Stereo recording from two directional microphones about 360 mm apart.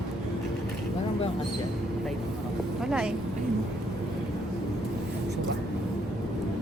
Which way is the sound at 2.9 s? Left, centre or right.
Centre.